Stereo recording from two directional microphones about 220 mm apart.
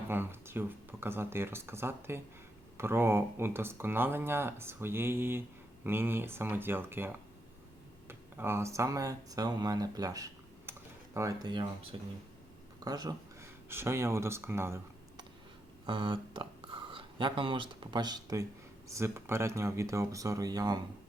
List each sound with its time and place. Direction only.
0.1 s speech: 10° right (ahead or behind)
15.9 s speech: 20° right (ahead or behind)